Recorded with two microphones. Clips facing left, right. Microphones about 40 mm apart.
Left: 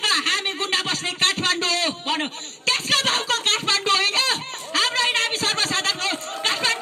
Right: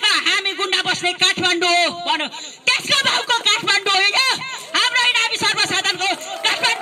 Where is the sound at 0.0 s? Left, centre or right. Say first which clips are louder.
Right 4 dB; right.